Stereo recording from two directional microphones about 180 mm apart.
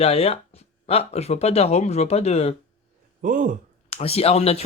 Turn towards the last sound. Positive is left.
turn(degrees=35)  # may be behind; listen again after turning